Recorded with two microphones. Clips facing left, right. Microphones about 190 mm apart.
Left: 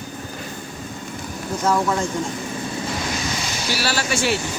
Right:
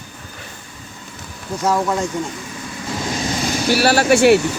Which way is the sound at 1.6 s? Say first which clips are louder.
Right 2 dB; 10° right (ahead or behind).